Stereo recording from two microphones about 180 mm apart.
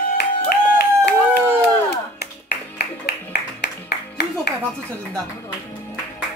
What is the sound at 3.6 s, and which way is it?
Music, 65° left (ahead or behind).